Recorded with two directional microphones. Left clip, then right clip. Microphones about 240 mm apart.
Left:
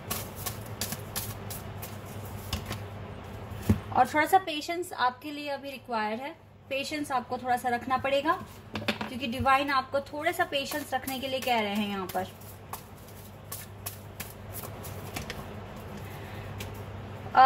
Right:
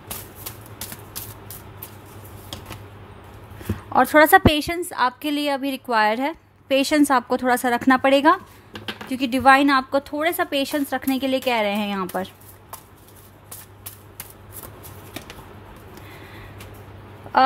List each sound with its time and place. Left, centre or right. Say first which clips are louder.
3.9 s a woman's voice: right 10 dB; right